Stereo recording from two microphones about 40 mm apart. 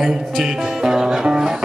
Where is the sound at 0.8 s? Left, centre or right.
Centre.